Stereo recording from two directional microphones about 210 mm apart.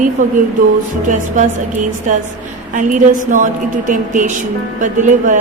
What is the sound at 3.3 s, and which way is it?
Speech, 35° right (ahead or behind).